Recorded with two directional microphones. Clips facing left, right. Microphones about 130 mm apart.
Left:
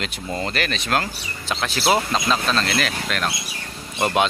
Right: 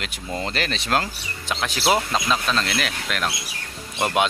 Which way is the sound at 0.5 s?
25° right (ahead or behind).